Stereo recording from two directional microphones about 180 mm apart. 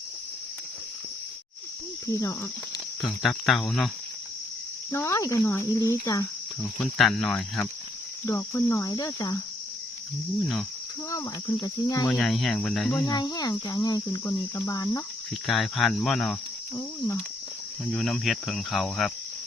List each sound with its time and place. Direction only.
2.0 s speech: 20° left (ahead or behind)
3.1 s cricket: centre (ahead or behind)
4.9 s speech: 15° left (ahead or behind)
6.7 s cricket: 5° left (ahead or behind); by 9.4 s 20° left (ahead or behind)
11.1 s cricket: 20° left (ahead or behind)
12.0 s cricket: 5° left (ahead or behind)
13.1 s cricket: 20° left (ahead or behind)
15.3 s cricket: centre (ahead or behind)
17.9 s cricket: centre (ahead or behind)